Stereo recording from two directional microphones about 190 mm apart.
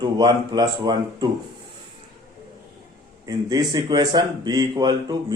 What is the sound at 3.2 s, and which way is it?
Speech, 20° right (ahead or behind).